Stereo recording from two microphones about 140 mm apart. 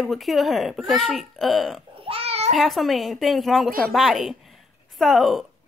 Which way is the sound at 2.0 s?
45° right (ahead or behind).